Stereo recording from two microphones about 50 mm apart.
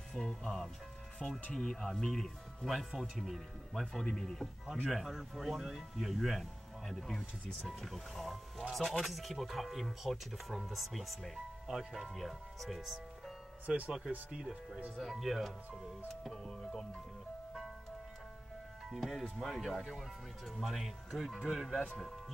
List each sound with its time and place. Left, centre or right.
0.1 s speech: centre
13.7 s speech: right
15.0 s speech: centre
18.9 s speech: centre